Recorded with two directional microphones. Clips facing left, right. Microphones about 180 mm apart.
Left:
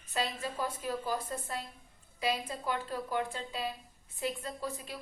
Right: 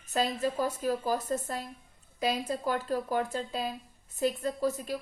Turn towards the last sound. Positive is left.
turn(degrees=-45)  # may be behind; listen again after turning